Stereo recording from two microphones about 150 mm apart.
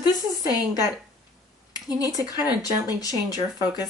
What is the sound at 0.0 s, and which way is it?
Speech, 25° left (ahead or behind).